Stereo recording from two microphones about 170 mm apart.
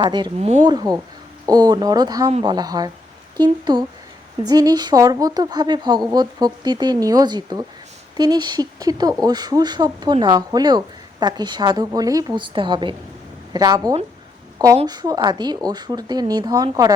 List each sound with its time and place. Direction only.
0.0 s speech: 25° right (ahead or behind)
0.3 s speech: 40° right (ahead or behind)
0.6 s speech: 25° right (ahead or behind)